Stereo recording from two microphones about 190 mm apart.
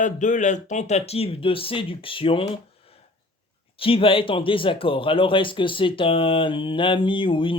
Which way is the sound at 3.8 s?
30° left (ahead or behind).